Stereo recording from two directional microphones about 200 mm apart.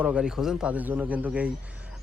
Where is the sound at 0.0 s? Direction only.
5° right (ahead or behind).